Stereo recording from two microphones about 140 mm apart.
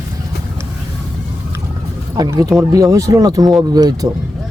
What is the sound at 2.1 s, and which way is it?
Speech, 25° right (ahead or behind).